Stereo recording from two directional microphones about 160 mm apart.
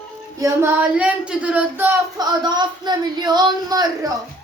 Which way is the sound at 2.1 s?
25° right (ahead or behind).